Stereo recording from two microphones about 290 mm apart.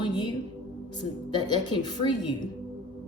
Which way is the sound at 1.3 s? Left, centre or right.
Centre.